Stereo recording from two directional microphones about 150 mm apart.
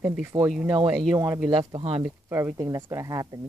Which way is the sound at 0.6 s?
30° right (ahead or behind).